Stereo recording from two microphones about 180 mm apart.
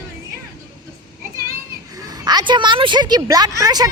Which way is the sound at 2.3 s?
25° right (ahead or behind).